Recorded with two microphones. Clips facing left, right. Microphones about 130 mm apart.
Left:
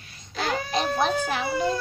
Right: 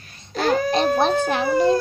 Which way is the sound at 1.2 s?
60° right (ahead or behind).